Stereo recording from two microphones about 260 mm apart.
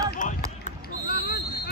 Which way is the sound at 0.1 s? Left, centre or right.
Left.